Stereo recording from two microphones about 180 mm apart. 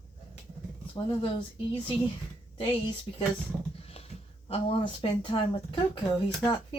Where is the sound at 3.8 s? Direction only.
35° left (ahead or behind).